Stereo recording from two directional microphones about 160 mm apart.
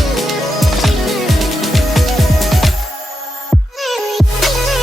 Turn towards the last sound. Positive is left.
turn(degrees=0)  # may be behind; listen again after turning